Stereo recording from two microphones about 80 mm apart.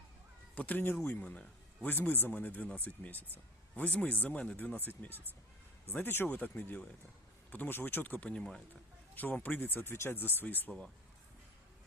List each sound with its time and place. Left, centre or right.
0.5 s speech: centre
9.1 s speech: left